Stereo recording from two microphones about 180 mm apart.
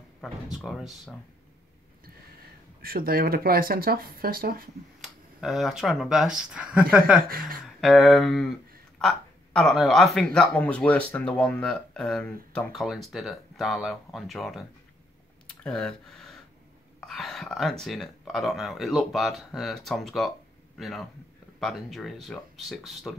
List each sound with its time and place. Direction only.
0.2 s speech: centre (ahead or behind)
2.8 s speech: 55° right (ahead or behind)
5.0 s speech: centre (ahead or behind)
7.2 s speech: 55° right (ahead or behind)
7.6 s speech: centre (ahead or behind)
15.4 s a sound: 5° left (ahead or behind)
17.0 s a man's voice: centre (ahead or behind)